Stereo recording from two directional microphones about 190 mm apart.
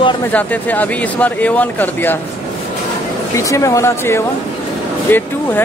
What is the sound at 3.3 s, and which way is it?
Speech, 15° left (ahead or behind).